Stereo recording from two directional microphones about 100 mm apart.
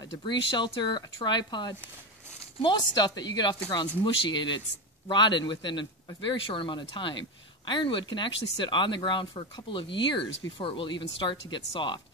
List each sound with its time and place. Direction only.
0.2 s a man's voice: 50° left (ahead or behind)
9.3 s speech: 65° left (ahead or behind); by 12.0 s 50° left (ahead or behind)